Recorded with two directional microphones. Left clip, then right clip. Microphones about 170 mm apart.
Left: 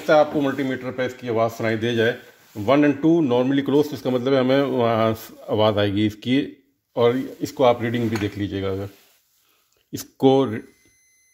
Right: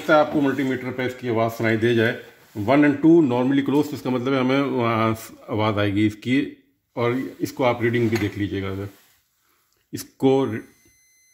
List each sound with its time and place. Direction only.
0.0 s speech: 30° left (ahead or behind)
9.9 s speech: 40° left (ahead or behind)